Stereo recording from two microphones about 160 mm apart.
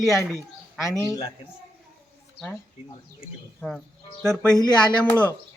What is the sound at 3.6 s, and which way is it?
Speech, centre (ahead or behind).